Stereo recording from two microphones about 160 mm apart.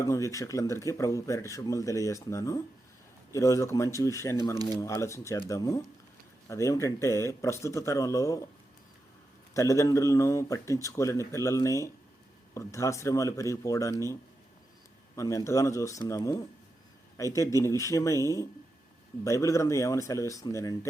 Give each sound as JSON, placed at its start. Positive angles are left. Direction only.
{"t": 0.0, "sound": "speech", "side_deg": 20}
{"t": 9.6, "sound": "speech", "side_deg": 20}